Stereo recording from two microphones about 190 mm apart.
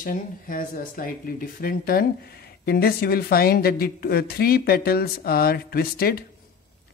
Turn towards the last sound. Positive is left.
turn(degrees=55)  # may be behind; listen again after turning